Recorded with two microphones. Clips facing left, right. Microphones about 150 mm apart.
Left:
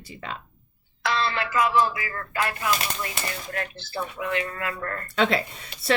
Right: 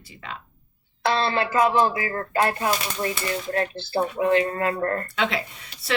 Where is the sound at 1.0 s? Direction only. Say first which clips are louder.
Right 4 dB; 30° right (ahead or behind).